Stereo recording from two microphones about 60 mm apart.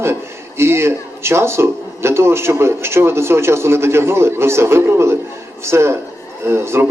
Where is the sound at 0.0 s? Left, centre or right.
Right.